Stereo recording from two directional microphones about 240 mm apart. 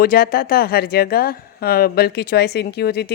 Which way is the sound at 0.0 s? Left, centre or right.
Left.